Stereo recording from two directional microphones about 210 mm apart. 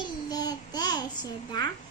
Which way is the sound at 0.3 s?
20° left (ahead or behind).